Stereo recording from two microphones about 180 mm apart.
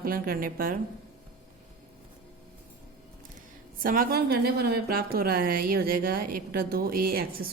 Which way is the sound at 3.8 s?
50° right (ahead or behind).